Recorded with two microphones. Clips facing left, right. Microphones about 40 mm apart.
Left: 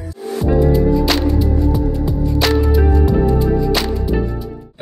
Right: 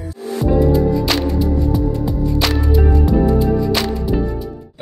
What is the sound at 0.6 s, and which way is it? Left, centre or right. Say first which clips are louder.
Music: left 1 dB; centre.